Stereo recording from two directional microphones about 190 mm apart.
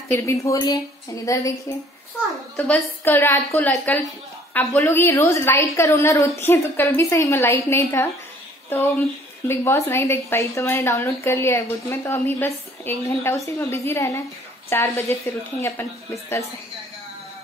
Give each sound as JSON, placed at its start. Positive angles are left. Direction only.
{"t": 0.1, "sound": "a woman's voice", "side_deg": 15}
{"t": 2.5, "sound": "a woman's voice", "side_deg": 10}